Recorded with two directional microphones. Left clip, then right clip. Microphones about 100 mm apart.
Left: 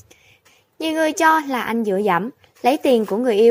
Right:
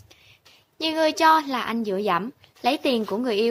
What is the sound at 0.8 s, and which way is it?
A woman's voice, 25° left (ahead or behind).